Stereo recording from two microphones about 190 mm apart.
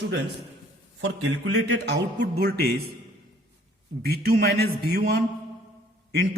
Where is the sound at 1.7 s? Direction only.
60° right (ahead or behind).